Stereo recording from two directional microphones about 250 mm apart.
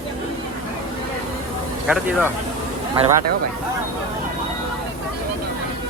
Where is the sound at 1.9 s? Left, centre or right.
Centre.